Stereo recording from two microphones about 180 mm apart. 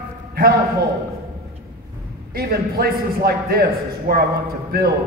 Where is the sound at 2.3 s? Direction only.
55° right (ahead or behind).